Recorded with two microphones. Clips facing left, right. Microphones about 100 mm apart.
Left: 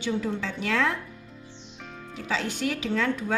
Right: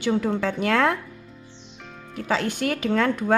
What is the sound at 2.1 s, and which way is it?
A woman's voice, 50° right (ahead or behind).